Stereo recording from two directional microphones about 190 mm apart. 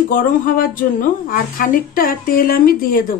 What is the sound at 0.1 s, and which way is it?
A woman's voice, 45° left (ahead or behind).